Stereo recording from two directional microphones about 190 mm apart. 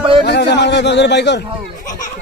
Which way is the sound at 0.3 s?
60° left (ahead or behind).